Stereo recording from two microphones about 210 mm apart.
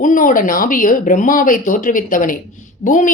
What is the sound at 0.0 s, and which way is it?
A woman's voice, 40° left (ahead or behind).